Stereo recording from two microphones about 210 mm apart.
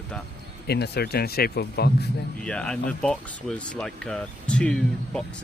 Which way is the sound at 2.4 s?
5° left (ahead or behind).